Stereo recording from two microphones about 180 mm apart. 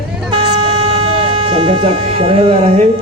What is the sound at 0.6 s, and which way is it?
Music, 30° right (ahead or behind).